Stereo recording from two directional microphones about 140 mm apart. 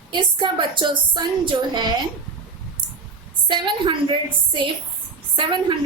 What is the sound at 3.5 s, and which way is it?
A woman's voice, 35° right (ahead or behind).